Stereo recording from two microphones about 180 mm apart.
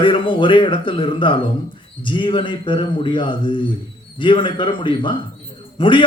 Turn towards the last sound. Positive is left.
turn(degrees=25)  # may be behind; listen again after turning